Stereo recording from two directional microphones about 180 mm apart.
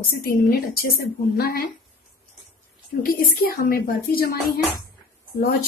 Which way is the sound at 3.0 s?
55° left (ahead or behind).